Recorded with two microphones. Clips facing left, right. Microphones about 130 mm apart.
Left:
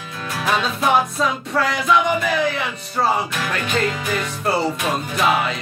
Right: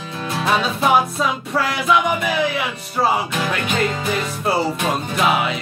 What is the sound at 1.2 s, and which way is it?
Music, 5° right (ahead or behind).